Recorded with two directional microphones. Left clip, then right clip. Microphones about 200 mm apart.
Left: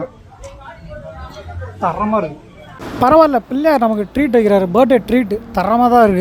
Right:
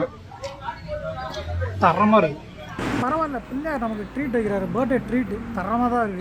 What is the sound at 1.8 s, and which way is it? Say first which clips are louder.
Speech: even; centre (ahead or behind).